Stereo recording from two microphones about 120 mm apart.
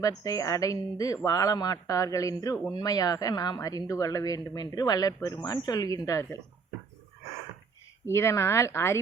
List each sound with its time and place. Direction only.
0.0 s speech: 30° left (ahead or behind)
8.0 s speech: 25° left (ahead or behind)